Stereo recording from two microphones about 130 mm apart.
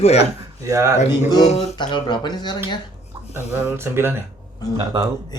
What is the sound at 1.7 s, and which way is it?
Speech, 35° left (ahead or behind).